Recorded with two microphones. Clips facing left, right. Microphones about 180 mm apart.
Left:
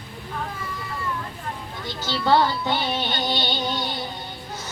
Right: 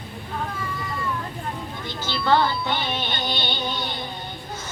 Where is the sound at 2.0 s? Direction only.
35° left (ahead or behind).